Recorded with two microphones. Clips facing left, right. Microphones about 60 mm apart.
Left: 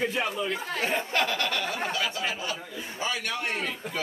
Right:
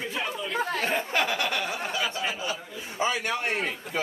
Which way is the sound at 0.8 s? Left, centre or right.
Centre.